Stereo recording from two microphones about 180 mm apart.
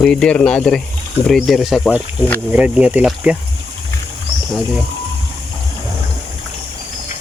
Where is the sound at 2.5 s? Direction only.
5° right (ahead or behind).